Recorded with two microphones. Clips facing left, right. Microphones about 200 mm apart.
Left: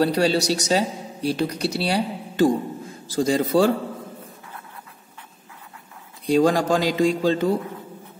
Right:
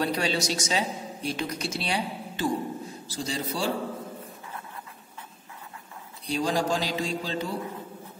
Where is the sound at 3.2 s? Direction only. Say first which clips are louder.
Left 12 dB; 55° left (ahead or behind).